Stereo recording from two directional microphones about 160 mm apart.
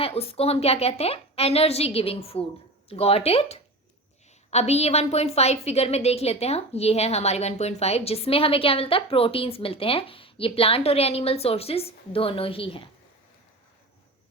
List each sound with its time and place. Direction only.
0.0 s a woman's voice: 35° left (ahead or behind)